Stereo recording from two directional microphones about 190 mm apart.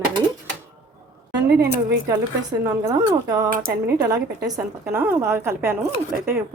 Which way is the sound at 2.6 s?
15° right (ahead or behind).